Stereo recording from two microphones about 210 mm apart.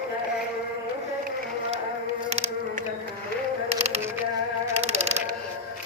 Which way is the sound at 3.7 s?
30° right (ahead or behind).